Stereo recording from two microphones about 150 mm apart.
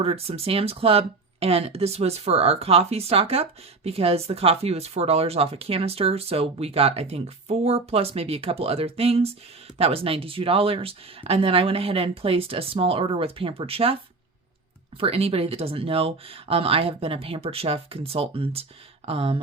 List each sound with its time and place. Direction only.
0.0 s speech: 40° right (ahead or behind)